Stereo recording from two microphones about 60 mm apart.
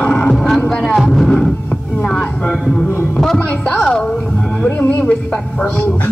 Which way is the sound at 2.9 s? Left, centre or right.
Left.